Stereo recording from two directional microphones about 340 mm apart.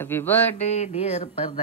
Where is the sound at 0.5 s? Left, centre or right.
Centre.